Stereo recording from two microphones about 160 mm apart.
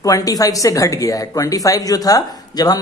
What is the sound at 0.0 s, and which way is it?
A man's voice, 20° left (ahead or behind).